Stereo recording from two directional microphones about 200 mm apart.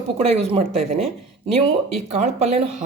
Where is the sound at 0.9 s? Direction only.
30° right (ahead or behind).